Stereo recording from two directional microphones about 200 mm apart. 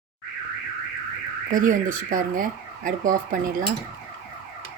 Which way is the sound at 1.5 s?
40° right (ahead or behind).